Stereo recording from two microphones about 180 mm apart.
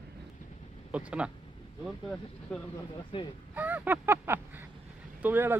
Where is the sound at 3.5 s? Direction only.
10° right (ahead or behind).